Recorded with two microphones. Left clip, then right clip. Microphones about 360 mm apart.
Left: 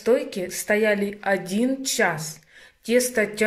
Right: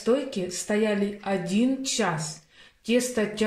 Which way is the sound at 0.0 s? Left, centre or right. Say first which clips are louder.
Left 4 dB; centre.